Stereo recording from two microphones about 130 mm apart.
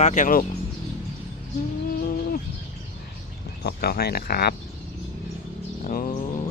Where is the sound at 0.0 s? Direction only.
75° left (ahead or behind).